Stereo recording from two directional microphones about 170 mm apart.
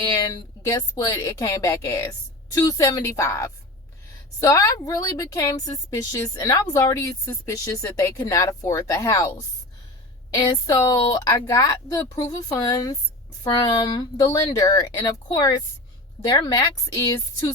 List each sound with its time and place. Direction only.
0.0 s a woman's voice: 25° left (ahead or behind)
10.3 s a woman's voice: 20° left (ahead or behind)